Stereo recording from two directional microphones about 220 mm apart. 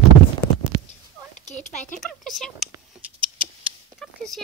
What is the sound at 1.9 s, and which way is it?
Speech, centre (ahead or behind).